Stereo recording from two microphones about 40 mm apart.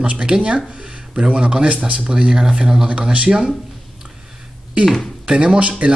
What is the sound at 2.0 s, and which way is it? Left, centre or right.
Speech, centre.